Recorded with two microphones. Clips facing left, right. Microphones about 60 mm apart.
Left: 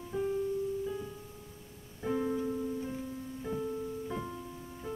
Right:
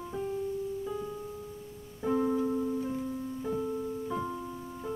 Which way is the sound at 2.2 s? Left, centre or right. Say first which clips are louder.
Right 4 dB; centre.